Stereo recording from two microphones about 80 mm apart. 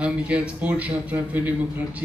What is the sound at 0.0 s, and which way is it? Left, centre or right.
A man's voice, centre.